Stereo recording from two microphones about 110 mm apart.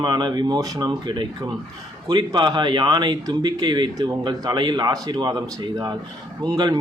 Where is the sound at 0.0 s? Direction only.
40° right (ahead or behind).